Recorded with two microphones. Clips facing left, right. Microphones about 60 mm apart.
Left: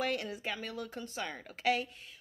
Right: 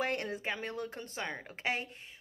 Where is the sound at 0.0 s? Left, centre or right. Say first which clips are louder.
Right 1 dB; right.